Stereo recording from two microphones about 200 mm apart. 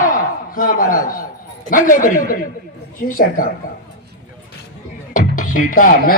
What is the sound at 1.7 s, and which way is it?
A man's voice, 45° left (ahead or behind).